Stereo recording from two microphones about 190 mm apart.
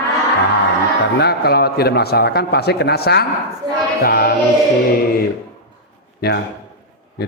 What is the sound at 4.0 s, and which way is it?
Music, 50° left (ahead or behind).